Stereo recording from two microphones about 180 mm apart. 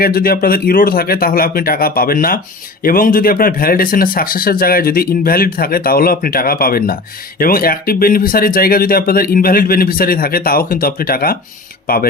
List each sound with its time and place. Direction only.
0.0 s speech: 55° left (ahead or behind)